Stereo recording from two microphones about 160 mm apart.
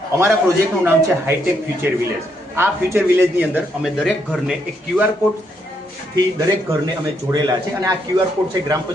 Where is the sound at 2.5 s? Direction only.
15° right (ahead or behind).